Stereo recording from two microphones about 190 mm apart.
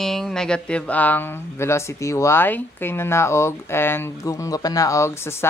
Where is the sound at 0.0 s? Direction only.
Centre (ahead or behind).